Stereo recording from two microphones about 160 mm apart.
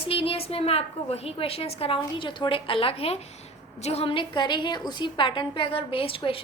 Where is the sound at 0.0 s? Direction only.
35° left (ahead or behind).